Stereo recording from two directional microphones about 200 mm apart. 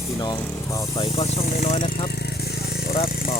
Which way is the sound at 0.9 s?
30° left (ahead or behind).